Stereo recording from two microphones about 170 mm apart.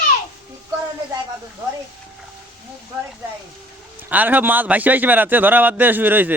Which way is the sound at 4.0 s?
10° right (ahead or behind).